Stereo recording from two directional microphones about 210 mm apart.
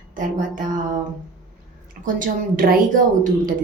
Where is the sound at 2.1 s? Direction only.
40° right (ahead or behind).